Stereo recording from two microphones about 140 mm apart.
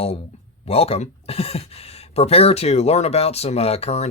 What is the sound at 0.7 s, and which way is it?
Speech, 45° left (ahead or behind).